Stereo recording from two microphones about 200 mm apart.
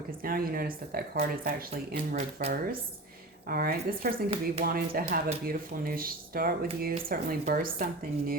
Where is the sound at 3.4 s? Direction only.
50° right (ahead or behind).